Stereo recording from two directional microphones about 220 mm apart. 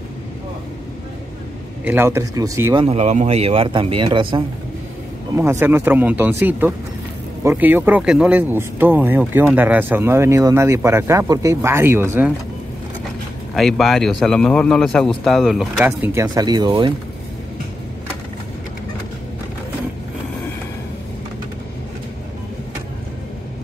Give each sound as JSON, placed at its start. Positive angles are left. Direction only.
{"t": 1.9, "sound": "speech", "side_deg": -10}
{"t": 5.3, "sound": "speech", "side_deg": -10}
{"t": 13.6, "sound": "a man's voice", "side_deg": 0}